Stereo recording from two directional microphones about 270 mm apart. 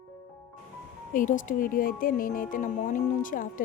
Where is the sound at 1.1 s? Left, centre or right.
Left.